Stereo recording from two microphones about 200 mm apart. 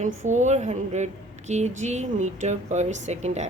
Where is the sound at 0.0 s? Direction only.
35° right (ahead or behind).